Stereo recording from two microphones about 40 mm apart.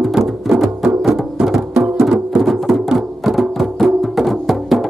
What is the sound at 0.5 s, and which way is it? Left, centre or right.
Music, centre.